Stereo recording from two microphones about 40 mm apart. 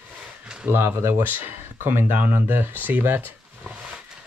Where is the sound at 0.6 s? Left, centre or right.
Right.